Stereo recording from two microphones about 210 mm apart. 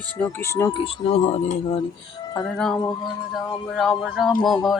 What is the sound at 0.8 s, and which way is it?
Speech, 25° left (ahead or behind).